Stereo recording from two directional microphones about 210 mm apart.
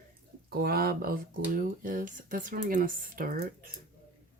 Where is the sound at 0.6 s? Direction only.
45° right (ahead or behind).